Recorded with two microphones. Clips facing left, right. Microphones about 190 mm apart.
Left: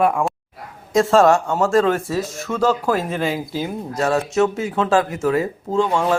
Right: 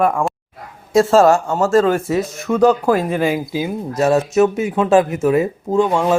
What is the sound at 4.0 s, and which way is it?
Speech, 20° right (ahead or behind).